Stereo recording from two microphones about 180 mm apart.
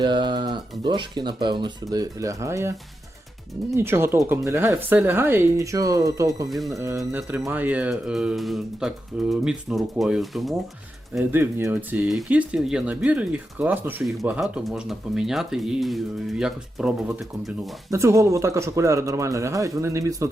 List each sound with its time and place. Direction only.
0.0 s speech: 25° right (ahead or behind)
3.8 s speech: 15° right (ahead or behind)
17.9 s speech: 15° right (ahead or behind)